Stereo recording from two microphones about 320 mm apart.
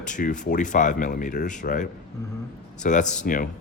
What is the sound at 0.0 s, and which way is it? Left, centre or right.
Speech, left.